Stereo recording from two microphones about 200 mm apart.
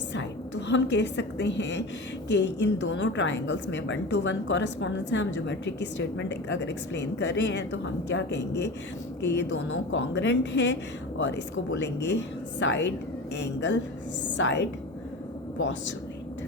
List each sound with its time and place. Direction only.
0.1 s a woman's voice: 60° left (ahead or behind)
9.9 s a woman's voice: 65° left (ahead or behind)